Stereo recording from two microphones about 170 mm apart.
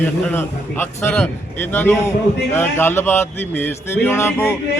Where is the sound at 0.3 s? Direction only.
15° left (ahead or behind).